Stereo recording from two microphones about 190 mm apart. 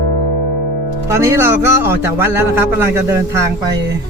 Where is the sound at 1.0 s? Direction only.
15° right (ahead or behind).